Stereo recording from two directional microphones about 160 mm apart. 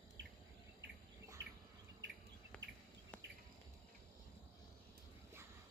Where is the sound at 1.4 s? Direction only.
90° right.